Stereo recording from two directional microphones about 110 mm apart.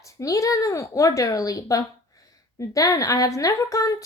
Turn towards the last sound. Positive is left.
turn(degrees=30)  # may be behind; listen again after turning